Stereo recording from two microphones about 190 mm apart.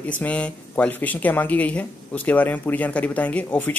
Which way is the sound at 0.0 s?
10° left (ahead or behind).